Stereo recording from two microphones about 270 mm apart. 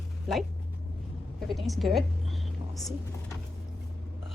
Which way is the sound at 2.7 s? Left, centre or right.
Centre.